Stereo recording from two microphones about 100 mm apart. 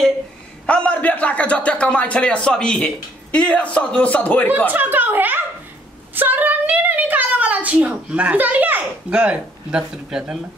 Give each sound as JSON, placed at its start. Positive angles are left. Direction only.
{"t": 0.7, "sound": "a man's voice", "side_deg": 15}
{"t": 4.6, "sound": "a woman's voice", "side_deg": -20}